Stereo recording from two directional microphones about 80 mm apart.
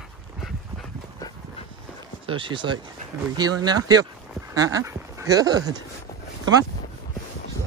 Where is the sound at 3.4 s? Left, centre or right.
Right.